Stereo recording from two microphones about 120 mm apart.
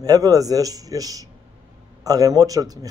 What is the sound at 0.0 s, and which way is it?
Speech, 30° right (ahead or behind).